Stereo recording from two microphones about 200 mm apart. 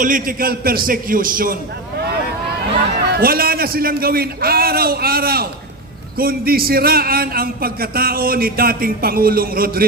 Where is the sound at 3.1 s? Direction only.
50° right (ahead or behind).